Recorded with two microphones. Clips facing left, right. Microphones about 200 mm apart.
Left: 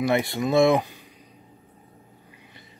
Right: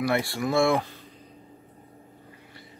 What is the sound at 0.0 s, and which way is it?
Speech, 20° left (ahead or behind).